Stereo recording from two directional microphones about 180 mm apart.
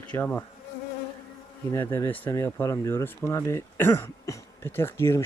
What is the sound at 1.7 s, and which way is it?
Speech, 15° left (ahead or behind).